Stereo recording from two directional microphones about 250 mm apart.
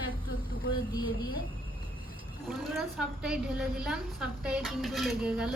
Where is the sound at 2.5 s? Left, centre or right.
Centre.